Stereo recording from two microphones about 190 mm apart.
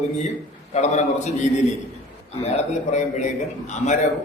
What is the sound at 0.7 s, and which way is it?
Speech, 35° left (ahead or behind).